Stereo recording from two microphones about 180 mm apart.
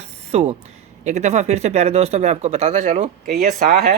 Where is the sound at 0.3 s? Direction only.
35° right (ahead or behind).